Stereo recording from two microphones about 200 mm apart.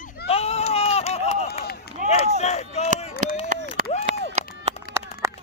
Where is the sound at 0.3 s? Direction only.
30° left (ahead or behind).